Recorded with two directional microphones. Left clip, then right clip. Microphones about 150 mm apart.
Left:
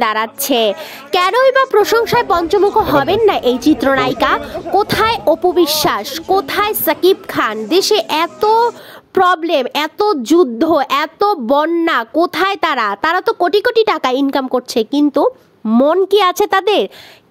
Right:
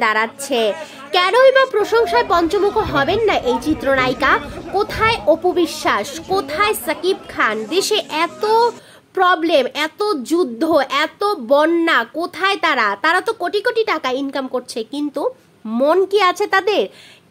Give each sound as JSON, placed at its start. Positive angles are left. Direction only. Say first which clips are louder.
{"t": 0.0, "sound": "a child's voice", "louder": "left 1 dB", "side_deg": 45}
{"t": 6.3, "sound": "a child's voice", "louder": "left 3 dB", "side_deg": 35}
{"t": 13.2, "sound": "a child's voice", "louder": "left 6 dB", "side_deg": 40}